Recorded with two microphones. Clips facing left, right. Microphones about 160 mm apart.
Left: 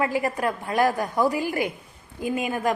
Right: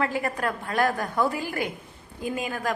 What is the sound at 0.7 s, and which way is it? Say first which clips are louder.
Speech: left 2 dB; 20° left (ahead or behind).